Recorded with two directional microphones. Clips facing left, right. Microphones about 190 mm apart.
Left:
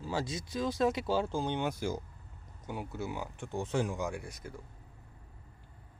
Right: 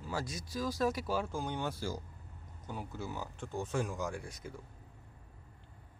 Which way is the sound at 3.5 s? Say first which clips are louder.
Left 3 dB; 25° left (ahead or behind).